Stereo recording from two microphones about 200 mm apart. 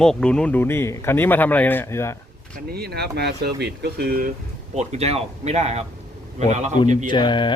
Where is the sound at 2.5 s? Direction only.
50° right (ahead or behind).